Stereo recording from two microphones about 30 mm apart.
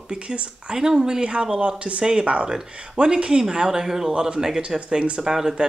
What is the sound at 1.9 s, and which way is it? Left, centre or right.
Speech, right.